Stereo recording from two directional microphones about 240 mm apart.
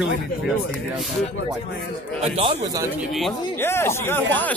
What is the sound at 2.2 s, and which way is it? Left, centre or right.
Speech, right.